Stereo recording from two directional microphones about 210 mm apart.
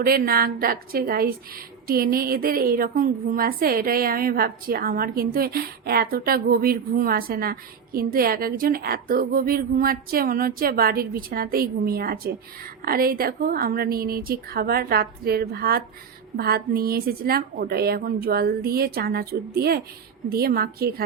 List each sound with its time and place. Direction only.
0.0 s a woman's voice: 45° right (ahead or behind)